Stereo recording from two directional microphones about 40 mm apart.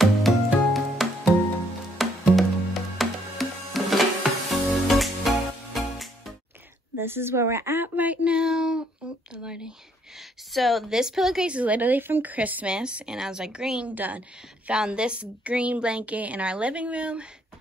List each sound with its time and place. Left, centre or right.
0.7 s music: centre
7.0 s speech: right
7.8 s a sound: right
8.3 s a sound: right
10.5 s speech: centre
10.9 s a woman's voice: centre
11.4 s speech: right
12.0 s speech: right
12.6 s a woman's voice: right
13.8 s speech: right
14.7 s a woman's voice: right